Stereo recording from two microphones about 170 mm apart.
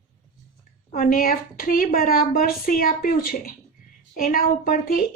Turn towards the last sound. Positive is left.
turn(degrees=55)  # may be behind; listen again after turning